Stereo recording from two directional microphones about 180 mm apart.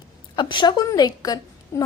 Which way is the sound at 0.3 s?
25° left (ahead or behind).